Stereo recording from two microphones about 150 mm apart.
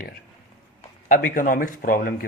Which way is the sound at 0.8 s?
60° left (ahead or behind).